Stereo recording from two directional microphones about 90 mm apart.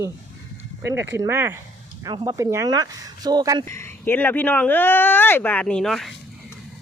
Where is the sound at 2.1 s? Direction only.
45° right (ahead or behind).